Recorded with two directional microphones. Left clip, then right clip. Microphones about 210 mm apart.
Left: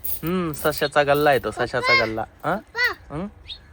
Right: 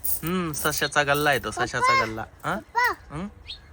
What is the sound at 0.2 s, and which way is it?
Speech, 10° right (ahead or behind).